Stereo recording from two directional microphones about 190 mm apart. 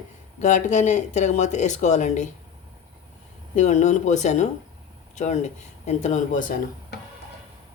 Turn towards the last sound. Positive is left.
turn(degrees=40)  # may be behind; listen again after turning